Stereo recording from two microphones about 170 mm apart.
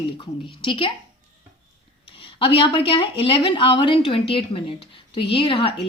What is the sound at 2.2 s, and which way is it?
Speech, 30° left (ahead or behind).